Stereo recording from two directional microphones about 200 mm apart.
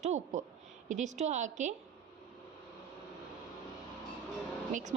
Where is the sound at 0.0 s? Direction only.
35° right (ahead or behind).